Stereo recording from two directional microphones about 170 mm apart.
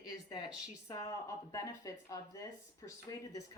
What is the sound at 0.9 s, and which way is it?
Speech, 20° left (ahead or behind).